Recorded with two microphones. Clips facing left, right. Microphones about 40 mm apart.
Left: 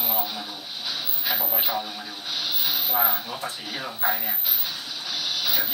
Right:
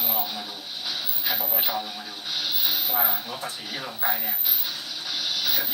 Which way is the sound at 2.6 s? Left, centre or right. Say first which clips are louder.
Left 4 dB; centre.